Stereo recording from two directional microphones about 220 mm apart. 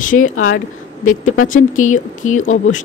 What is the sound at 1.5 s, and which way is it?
Speech, 35° left (ahead or behind).